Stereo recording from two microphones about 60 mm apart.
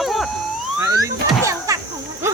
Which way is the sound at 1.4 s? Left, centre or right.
Right.